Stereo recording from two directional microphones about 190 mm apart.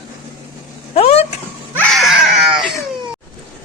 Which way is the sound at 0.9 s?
35° left (ahead or behind).